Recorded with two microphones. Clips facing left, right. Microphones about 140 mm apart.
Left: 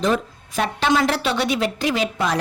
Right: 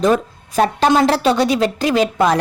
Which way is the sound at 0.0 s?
40° right (ahead or behind).